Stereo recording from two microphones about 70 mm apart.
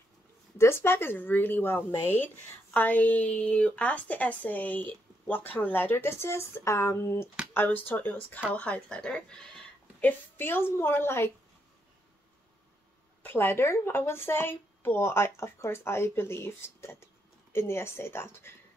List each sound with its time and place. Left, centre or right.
0.6 s speech: left
7.5 s speech: left
10.0 s speech: left
13.2 s speech: left